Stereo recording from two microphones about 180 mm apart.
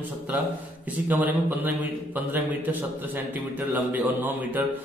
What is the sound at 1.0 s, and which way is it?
A man's voice, 10° right (ahead or behind).